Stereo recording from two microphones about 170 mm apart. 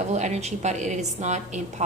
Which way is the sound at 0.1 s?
40° right (ahead or behind).